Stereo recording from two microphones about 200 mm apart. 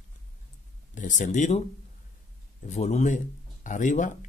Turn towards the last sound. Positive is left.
turn(degrees=40)  # may be behind; listen again after turning